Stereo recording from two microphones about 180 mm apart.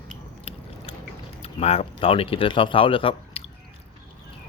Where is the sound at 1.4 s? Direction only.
35° left (ahead or behind).